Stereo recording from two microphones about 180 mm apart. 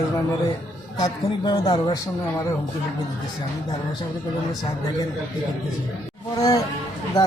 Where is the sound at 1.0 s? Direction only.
20° left (ahead or behind).